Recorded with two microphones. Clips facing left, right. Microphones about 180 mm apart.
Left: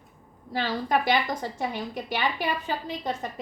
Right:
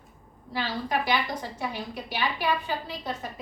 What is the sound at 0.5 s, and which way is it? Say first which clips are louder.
A woman's voice: left 3 dB; 50° left (ahead or behind).